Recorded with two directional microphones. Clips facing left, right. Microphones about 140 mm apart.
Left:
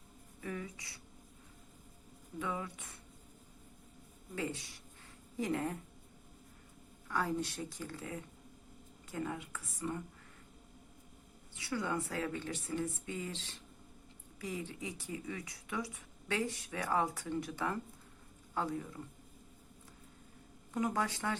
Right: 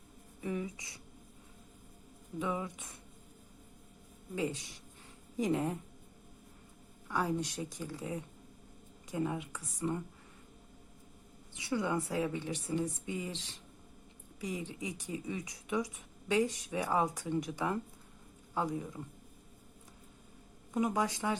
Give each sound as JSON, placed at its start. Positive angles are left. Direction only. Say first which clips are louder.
{"t": 0.4, "sound": "speech", "louder": "right 5 dB", "side_deg": -20}
{"t": 2.4, "sound": "speech", "louder": "right 3 dB", "side_deg": -20}
{"t": 4.4, "sound": "a woman's voice", "louder": "right 4 dB", "side_deg": -20}
{"t": 7.1, "sound": "a woman's voice", "louder": "right 2 dB", "side_deg": -15}
{"t": 11.5, "sound": "a woman's voice", "louder": "right 3 dB", "side_deg": -20}
{"t": 20.7, "sound": "a woman's voice", "louder": "right 3 dB", "side_deg": -15}